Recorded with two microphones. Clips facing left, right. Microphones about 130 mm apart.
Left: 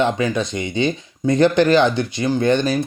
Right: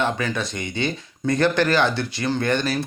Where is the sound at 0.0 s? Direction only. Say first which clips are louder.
Left 5 dB; 20° left (ahead or behind).